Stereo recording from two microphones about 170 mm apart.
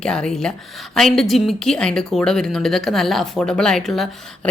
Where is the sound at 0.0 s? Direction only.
5° left (ahead or behind).